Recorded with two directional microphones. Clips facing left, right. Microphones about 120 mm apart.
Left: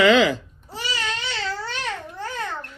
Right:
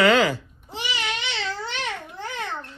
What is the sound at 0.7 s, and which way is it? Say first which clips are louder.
Babbling: left 1 dB; 20° right (ahead or behind).